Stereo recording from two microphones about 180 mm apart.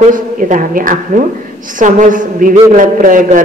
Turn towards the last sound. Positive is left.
turn(degrees=-45)  # may be behind; listen again after turning